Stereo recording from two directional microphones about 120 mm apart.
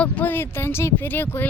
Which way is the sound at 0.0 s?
15° left (ahead or behind).